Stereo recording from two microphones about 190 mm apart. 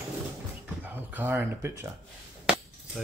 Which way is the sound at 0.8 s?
10° right (ahead or behind).